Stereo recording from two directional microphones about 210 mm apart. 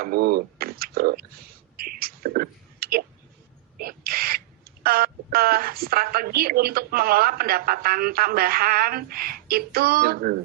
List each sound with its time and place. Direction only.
0.0 s speech: 45° right (ahead or behind)
1.7 s a sound: 45° right (ahead or behind)
3.8 s speech: 45° right (ahead or behind)